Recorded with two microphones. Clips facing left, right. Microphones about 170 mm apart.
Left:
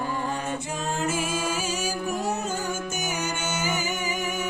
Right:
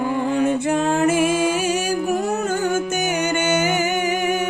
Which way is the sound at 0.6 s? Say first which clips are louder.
Right 11 dB; 65° right (ahead or behind).